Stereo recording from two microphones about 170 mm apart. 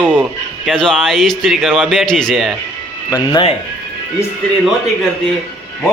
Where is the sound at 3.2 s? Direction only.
25° left (ahead or behind).